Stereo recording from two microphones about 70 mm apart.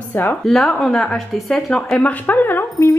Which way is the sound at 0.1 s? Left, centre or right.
Left.